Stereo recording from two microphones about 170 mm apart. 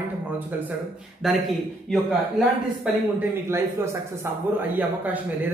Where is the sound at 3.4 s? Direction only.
15° right (ahead or behind).